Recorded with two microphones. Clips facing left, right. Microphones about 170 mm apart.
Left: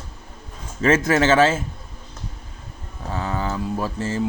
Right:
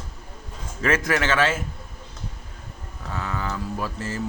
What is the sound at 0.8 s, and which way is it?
Speech, 25° left (ahead or behind).